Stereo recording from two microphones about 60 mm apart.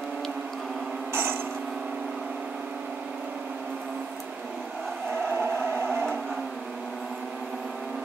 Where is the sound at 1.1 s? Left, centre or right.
Right.